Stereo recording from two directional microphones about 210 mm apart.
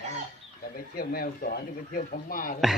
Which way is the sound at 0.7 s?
45° left (ahead or behind).